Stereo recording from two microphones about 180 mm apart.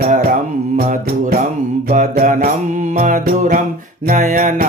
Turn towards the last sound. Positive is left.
turn(degrees=-50)  # may be behind; listen again after turning